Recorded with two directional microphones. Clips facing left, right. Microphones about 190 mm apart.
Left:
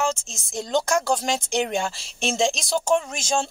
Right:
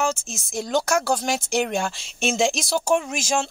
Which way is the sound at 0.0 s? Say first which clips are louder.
Right 1 dB; 10° right (ahead or behind).